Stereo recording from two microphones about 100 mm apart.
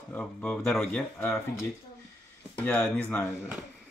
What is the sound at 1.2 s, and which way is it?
Speech, 25° left (ahead or behind).